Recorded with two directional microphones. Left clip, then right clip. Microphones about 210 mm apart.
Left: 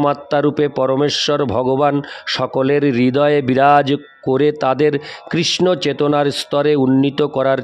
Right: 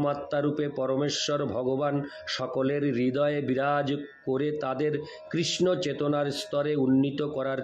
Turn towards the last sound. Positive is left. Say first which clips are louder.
# left 14 dB
turn(degrees=55)  # may be behind; listen again after turning